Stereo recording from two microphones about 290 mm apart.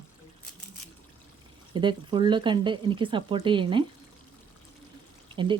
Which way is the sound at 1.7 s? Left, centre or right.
Centre.